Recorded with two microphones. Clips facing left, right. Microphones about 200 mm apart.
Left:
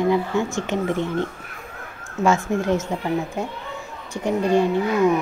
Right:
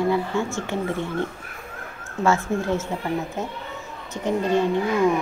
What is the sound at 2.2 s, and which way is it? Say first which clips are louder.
Speech: left 2 dB; 15° left (ahead or behind).